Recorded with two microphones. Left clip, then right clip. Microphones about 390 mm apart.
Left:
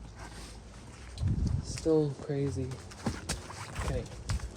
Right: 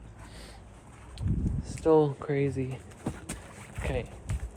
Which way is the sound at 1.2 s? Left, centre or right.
Centre.